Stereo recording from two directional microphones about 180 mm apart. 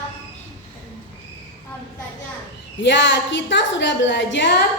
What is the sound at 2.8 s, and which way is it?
A woman's voice, 90° left.